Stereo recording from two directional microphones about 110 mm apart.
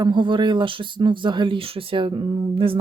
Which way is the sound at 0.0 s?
45° right (ahead or behind).